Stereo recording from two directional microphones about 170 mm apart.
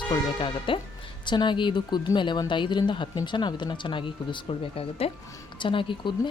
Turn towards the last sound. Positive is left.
turn(degrees=30)  # may be behind; listen again after turning